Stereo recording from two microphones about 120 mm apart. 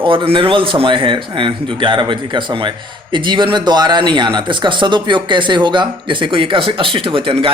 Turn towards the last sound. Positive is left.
turn(degrees=-50)  # may be behind; listen again after turning